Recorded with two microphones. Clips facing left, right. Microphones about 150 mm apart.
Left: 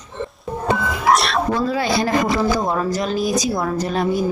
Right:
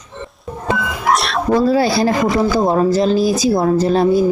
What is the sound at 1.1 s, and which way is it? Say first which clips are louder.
Cat: even; centre (ahead or behind).